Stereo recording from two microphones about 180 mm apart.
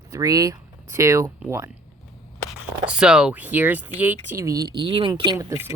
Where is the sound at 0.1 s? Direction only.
20° right (ahead or behind).